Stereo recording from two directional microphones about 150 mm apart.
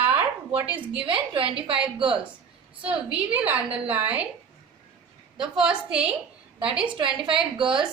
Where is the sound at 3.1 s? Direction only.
10° right (ahead or behind).